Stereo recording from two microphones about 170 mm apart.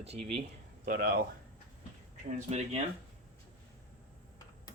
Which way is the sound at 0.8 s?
55° right (ahead or behind).